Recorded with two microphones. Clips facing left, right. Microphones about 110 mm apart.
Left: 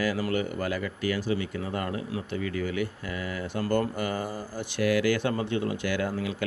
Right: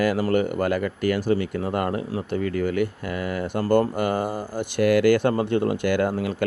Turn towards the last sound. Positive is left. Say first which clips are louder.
# right 6 dB
turn(degrees=-50)  # may be behind; listen again after turning